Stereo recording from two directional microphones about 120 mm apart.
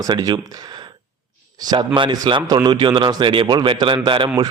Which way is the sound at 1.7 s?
40° right (ahead or behind).